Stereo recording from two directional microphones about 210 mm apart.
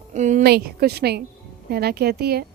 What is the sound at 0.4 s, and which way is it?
A woman's voice, 50° right (ahead or behind).